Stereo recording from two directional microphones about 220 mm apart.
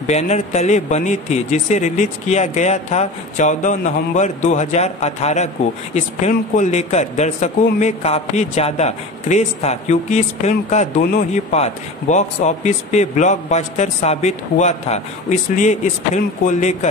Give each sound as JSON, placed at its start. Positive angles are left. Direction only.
{"t": 0.0, "sound": "speech", "side_deg": 30}